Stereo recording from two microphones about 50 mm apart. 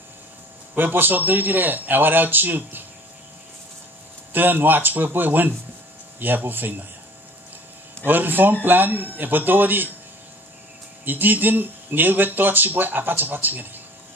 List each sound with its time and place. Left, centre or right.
0.7 s speech: right
4.3 s speech: right
8.0 s speech: right
11.1 s speech: right